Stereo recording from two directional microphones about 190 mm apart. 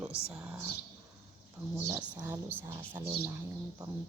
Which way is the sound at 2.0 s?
10° right (ahead or behind).